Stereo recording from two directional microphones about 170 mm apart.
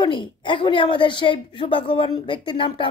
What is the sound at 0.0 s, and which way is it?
A woman's voice, 30° left (ahead or behind).